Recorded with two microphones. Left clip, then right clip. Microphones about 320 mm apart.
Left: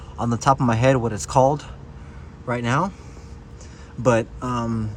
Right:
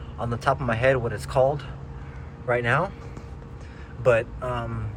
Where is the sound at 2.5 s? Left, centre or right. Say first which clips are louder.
Even; centre.